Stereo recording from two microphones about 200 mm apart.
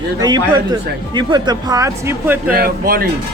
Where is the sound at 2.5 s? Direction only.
50° right (ahead or behind).